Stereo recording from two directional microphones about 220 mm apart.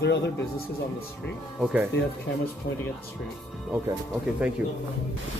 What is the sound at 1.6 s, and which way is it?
Speech, 5° right (ahead or behind).